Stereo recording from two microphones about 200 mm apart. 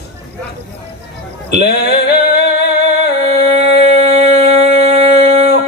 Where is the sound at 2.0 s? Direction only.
55° left (ahead or behind).